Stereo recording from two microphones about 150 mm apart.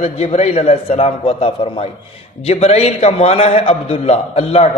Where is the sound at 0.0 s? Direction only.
50° left (ahead or behind).